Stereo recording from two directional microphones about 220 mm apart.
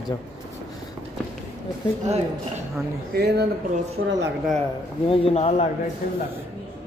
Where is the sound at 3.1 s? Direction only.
45° right (ahead or behind).